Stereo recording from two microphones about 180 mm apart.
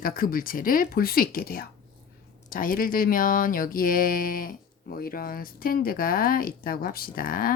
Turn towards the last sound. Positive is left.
turn(degrees=50)  # may be behind; listen again after turning